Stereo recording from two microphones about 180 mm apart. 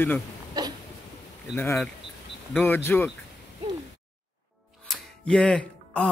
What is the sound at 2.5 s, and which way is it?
Speech, 10° left (ahead or behind).